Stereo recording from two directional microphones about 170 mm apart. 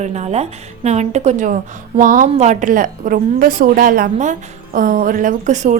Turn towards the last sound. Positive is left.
turn(degrees=-45)  # may be behind; listen again after turning